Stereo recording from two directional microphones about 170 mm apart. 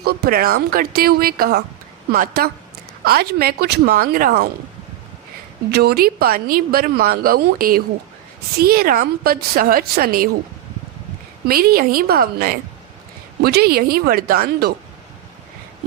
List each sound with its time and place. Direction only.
0.0 s a woman's voice: 65° right (ahead or behind)
5.7 s a woman's voice: 65° right (ahead or behind)
11.4 s a woman's voice: 60° right (ahead or behind)